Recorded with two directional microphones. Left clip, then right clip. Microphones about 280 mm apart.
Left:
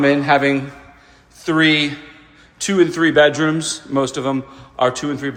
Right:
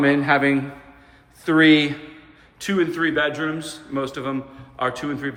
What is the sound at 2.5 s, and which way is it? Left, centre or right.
A man's voice, centre.